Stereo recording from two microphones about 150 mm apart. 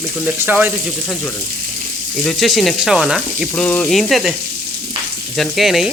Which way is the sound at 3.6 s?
5° left (ahead or behind).